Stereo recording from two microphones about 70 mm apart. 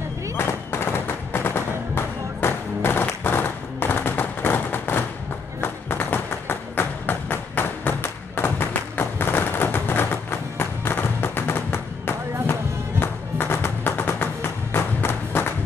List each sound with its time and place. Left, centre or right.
0.4 s music: left
5.6 s tap: left
13.0 s music: left